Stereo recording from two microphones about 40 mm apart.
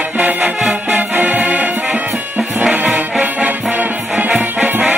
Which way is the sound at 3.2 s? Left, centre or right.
Right.